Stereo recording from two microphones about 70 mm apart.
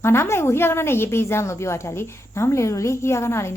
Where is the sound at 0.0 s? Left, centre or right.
Left.